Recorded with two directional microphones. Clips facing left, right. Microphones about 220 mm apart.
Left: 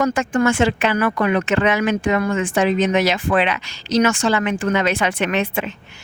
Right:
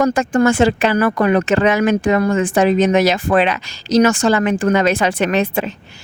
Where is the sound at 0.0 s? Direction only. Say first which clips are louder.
Right 4 dB; 35° right (ahead or behind).